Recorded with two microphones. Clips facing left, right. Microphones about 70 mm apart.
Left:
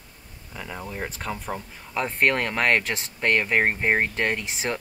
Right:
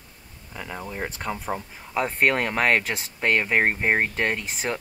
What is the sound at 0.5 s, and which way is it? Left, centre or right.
Speech, centre.